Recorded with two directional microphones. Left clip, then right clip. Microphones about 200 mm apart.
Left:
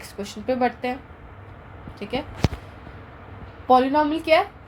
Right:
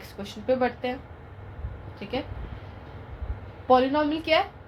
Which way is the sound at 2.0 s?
40° left (ahead or behind).